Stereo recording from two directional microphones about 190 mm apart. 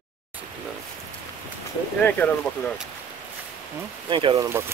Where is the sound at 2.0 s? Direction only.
10° left (ahead or behind).